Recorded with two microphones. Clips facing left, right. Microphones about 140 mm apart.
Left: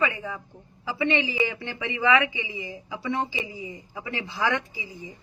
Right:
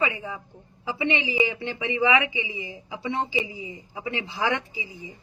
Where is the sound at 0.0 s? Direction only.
15° right (ahead or behind).